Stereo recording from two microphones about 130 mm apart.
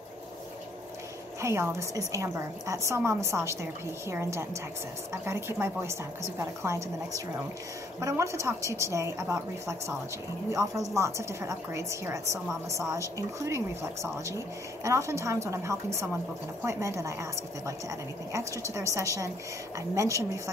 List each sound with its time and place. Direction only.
1.4 s a woman's voice: 20° right (ahead or behind)
8.0 s a woman's voice: 25° right (ahead or behind)
11.0 s a woman's voice: 25° right (ahead or behind)
14.8 s a woman's voice: 25° right (ahead or behind)